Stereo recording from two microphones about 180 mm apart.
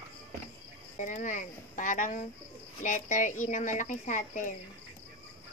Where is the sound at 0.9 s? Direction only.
45° left (ahead or behind).